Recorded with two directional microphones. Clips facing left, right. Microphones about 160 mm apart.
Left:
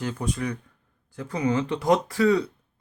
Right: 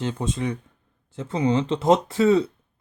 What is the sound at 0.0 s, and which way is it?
Speech, 25° right (ahead or behind).